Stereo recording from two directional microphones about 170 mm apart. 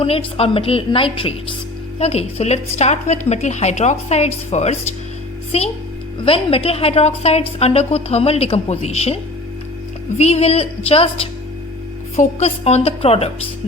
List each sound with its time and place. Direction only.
0.0 s a woman's voice: 35° left (ahead or behind)
10.2 s a woman's voice: 40° left (ahead or behind)